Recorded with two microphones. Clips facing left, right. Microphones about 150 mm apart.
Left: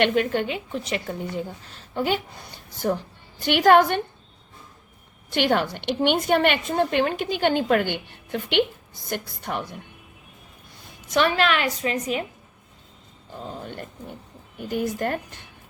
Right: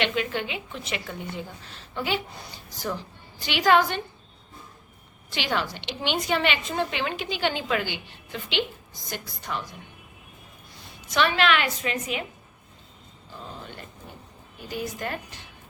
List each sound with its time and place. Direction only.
0.0 s a woman's voice: 45° left (ahead or behind)
5.3 s a woman's voice: 55° left (ahead or behind)
11.1 s a woman's voice: 45° left (ahead or behind)
14.7 s a woman's voice: 50° left (ahead or behind)